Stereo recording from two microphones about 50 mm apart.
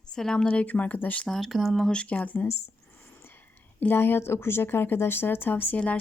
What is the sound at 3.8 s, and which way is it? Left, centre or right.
Speech, left.